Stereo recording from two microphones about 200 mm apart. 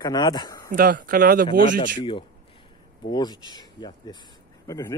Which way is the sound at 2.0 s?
25° left (ahead or behind).